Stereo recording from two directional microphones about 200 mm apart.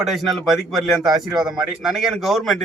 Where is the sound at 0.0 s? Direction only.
Centre (ahead or behind).